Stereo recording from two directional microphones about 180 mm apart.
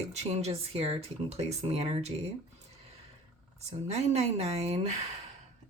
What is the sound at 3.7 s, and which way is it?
Speech, 35° right (ahead or behind).